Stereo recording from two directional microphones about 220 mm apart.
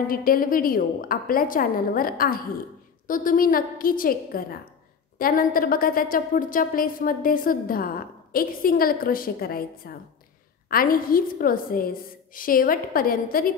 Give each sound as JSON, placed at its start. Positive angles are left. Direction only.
{"t": 0.1, "sound": "a woman's voice", "side_deg": 40}